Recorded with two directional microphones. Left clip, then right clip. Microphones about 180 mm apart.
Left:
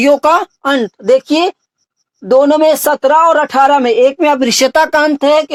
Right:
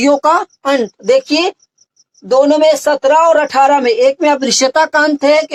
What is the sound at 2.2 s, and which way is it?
A woman's voice, 45° left (ahead or behind).